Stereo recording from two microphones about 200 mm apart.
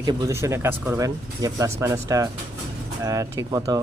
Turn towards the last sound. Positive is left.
turn(degrees=-15)  # may be behind; listen again after turning